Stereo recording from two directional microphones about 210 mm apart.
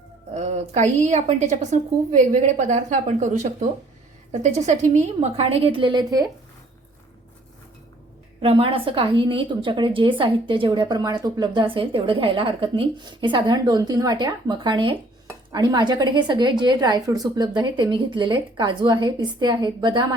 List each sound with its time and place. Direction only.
0.3 s a woman's voice: 30° right (ahead or behind)
8.4 s a woman's voice: 25° right (ahead or behind)